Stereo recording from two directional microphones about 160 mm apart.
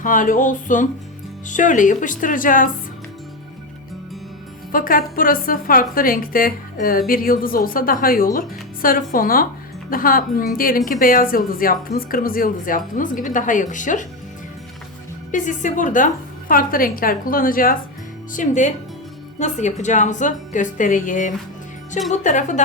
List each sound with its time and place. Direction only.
0.0 s a woman's voice: 55° left (ahead or behind)
4.7 s a woman's voice: 60° left (ahead or behind)
15.3 s a woman's voice: 55° left (ahead or behind)
18.3 s a woman's voice: 50° left (ahead or behind)